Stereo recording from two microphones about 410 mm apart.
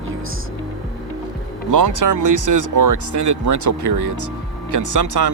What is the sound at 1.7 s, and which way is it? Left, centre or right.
Speech, right.